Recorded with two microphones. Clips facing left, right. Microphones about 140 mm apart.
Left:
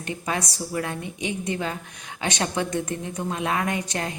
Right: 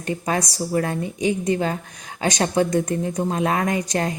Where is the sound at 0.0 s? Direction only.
35° right (ahead or behind).